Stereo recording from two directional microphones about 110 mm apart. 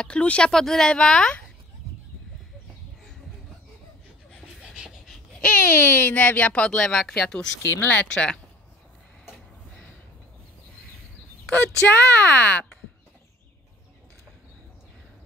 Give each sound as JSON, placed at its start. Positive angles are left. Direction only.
{"t": 0.0, "sound": "speech", "side_deg": 10}
{"t": 4.3, "sound": "pant", "side_deg": -5}
{"t": 5.4, "sound": "speech", "side_deg": 15}
{"t": 11.5, "sound": "speech", "side_deg": 20}